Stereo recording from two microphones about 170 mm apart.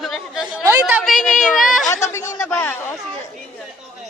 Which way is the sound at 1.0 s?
Centre (ahead or behind).